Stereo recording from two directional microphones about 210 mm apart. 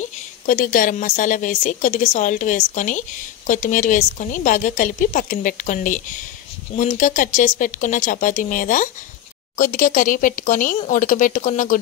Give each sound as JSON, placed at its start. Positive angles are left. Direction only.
{"t": 0.5, "sound": "a woman's voice", "side_deg": 40}